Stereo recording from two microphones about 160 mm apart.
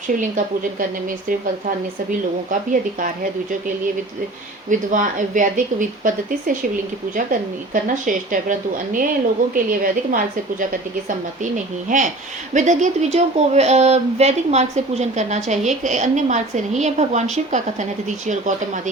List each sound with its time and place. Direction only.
0.2 s speech: 55° right (ahead or behind)
4.7 s speech: 55° right (ahead or behind)